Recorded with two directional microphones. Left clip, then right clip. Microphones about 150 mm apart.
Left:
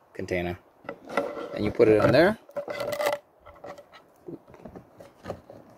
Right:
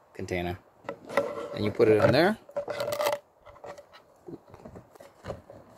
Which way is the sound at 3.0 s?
15° right (ahead or behind).